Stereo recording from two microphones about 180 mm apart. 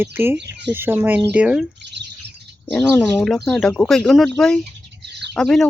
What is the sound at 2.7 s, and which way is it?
Speech, 10° left (ahead or behind).